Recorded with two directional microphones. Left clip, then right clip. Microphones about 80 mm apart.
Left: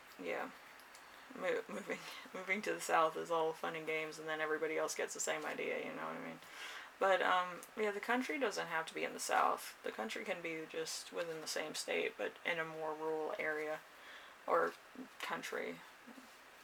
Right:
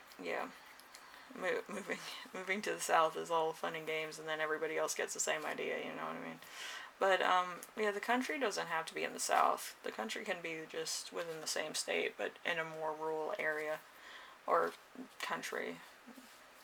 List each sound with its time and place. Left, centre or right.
0.3 s speech: right
13.5 s speech: right
15.2 s speech: right